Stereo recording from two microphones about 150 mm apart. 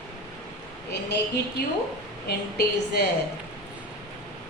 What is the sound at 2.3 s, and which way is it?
Speech, 90° left.